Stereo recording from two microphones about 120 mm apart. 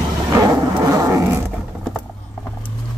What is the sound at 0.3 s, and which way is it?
Roar, 30° right (ahead or behind).